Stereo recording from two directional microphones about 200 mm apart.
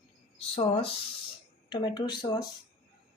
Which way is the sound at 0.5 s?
30° left (ahead or behind).